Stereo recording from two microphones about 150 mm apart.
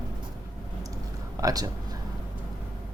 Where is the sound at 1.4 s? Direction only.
25° right (ahead or behind).